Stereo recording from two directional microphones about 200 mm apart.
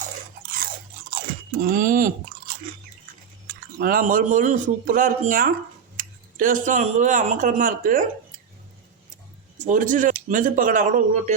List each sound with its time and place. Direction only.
1.1 s chewing: 50° right (ahead or behind)
3.4 s speech: 45° right (ahead or behind)
9.6 s speech: 40° right (ahead or behind)